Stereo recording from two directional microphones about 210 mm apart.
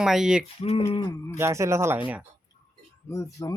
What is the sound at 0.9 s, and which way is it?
Speech, 30° left (ahead or behind).